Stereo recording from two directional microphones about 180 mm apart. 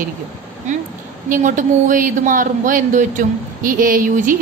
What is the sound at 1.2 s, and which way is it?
A man's voice, 45° right (ahead or behind).